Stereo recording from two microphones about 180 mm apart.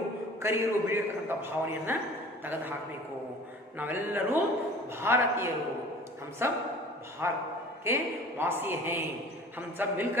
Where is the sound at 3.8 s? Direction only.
10° right (ahead or behind).